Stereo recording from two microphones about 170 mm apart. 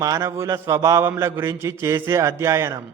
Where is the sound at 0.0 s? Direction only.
20° right (ahead or behind).